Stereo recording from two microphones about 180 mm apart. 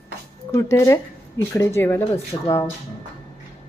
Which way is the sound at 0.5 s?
15° left (ahead or behind).